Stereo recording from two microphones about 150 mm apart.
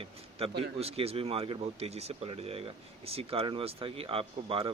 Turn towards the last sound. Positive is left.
turn(degrees=-40)  # may be behind; listen again after turning